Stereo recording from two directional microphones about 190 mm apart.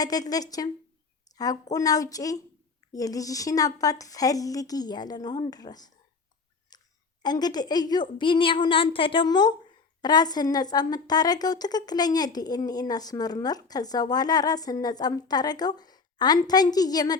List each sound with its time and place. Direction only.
0.0 s a woman's voice: 20° left (ahead or behind)
1.7 s a woman's voice: 20° left (ahead or behind)
6.7 s a sound: 20° left (ahead or behind)
8.2 s a woman's voice: 25° left (ahead or behind)